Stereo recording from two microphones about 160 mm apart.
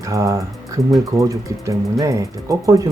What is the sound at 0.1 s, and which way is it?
Speech, 20° right (ahead or behind).